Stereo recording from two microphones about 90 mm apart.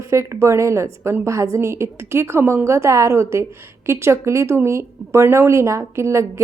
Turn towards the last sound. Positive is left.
turn(degrees=-30)  # may be behind; listen again after turning